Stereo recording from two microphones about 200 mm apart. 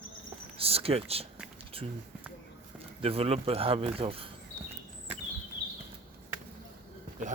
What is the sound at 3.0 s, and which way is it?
Speech, 30° right (ahead or behind).